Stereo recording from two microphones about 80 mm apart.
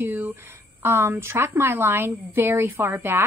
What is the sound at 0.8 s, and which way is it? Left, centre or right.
A woman's voice, right.